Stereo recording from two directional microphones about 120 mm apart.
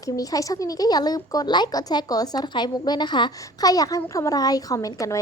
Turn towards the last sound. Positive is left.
turn(degrees=30)  # may be behind; listen again after turning